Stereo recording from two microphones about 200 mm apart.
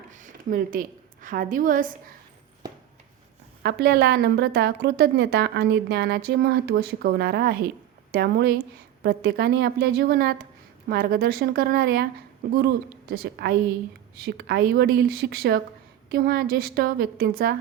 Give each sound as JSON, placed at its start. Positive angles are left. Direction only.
{"t": 0.1, "sound": "a woman's voice", "side_deg": -40}
{"t": 3.6, "sound": "a woman's voice", "side_deg": -55}